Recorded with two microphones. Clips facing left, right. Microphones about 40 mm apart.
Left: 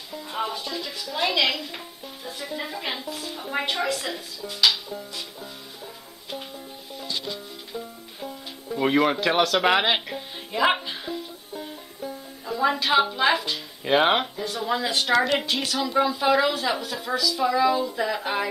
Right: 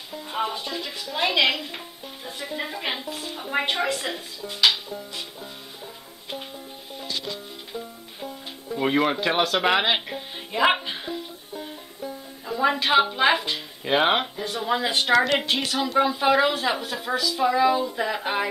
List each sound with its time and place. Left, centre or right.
0.1 s a woman's voice: centre
7.2 s music: centre
11.5 s music: centre
12.5 s a woman's voice: centre
13.8 s a woman's voice: centre
15.1 s a woman's voice: centre
15.4 s a woman's voice: centre